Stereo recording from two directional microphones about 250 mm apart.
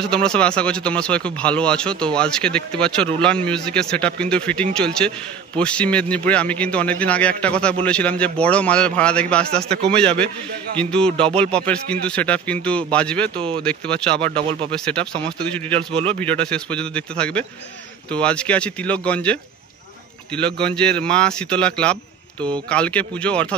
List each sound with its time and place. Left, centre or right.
0.0 s speech: centre
15.9 s speech: right
16.2 s speech: centre
20.6 s speech: centre